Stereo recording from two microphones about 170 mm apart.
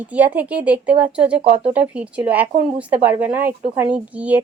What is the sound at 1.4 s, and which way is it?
Speech, 40° right (ahead or behind).